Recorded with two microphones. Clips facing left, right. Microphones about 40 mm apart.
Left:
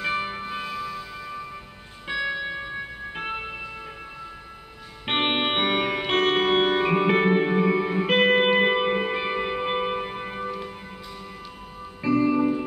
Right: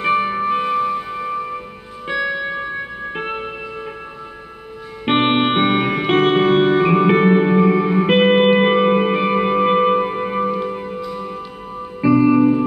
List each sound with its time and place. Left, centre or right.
0.0 s music: right
2.0 s music: centre
5.0 s music: centre
12.3 s music: right